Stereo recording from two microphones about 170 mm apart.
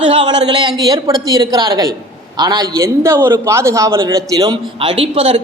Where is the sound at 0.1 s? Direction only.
30° right (ahead or behind).